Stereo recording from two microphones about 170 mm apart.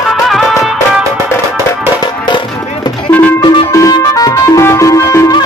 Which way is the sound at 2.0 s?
30° left (ahead or behind).